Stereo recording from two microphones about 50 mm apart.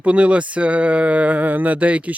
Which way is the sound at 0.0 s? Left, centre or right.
Right.